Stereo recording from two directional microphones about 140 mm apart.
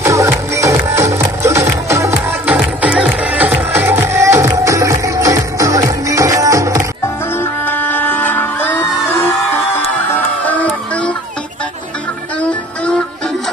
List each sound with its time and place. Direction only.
0.0 s music: 20° right (ahead or behind)
2.5 s music: 10° right (ahead or behind)
7.6 s music: 15° left (ahead or behind)
10.4 s music: 10° left (ahead or behind)
12.4 s music: 10° left (ahead or behind)